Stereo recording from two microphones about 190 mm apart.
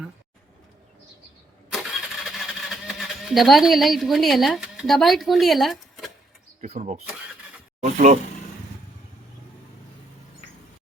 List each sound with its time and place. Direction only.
1.7 s engine starting: centre (ahead or behind)
6.6 s speech: 40° right (ahead or behind)